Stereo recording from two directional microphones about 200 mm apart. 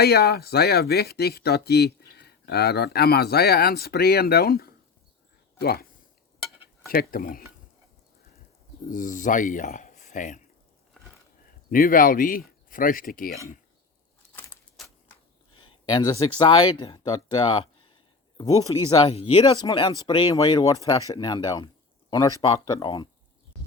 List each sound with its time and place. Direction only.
0.0 s speech: 55° left (ahead or behind)
6.9 s speech: 45° left (ahead or behind)
8.9 s speech: 40° left (ahead or behind)
11.7 s speech: 45° left (ahead or behind)
15.5 s speech: 20° left (ahead or behind)